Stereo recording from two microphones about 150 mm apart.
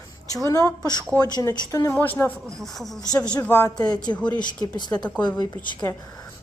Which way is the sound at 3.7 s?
25° left (ahead or behind).